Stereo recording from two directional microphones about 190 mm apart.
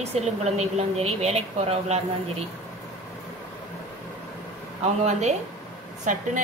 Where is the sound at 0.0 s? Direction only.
35° right (ahead or behind).